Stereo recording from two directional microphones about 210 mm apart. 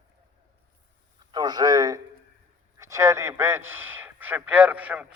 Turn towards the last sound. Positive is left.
turn(degrees=-5)  # may be behind; listen again after turning